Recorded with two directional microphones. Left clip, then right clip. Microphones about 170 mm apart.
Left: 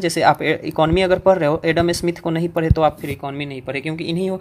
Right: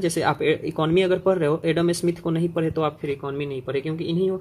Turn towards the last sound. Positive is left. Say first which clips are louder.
# left 1 dB
turn(degrees=35)  # may be behind; listen again after turning